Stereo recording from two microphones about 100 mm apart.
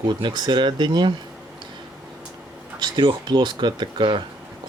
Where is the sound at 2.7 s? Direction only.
50° right (ahead or behind).